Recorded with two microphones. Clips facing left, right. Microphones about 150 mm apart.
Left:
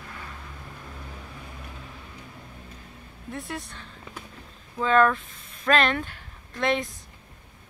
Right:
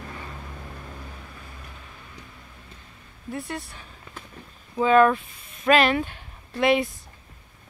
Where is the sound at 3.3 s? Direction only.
Centre (ahead or behind).